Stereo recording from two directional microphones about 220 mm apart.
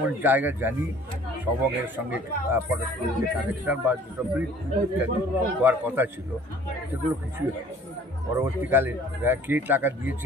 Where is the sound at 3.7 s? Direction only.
5° right (ahead or behind).